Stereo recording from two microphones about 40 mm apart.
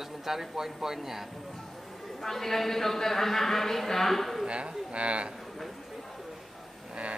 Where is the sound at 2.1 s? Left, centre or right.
Centre.